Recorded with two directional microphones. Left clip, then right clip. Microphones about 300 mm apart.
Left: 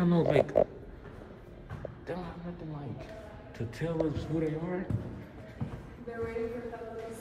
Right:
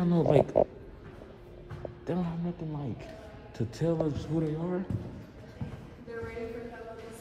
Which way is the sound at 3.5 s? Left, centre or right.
Centre.